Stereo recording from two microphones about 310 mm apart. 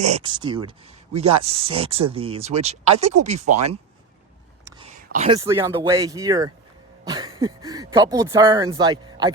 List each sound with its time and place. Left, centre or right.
0.0 s speech: centre
4.6 s a sound: centre
5.4 s speech: centre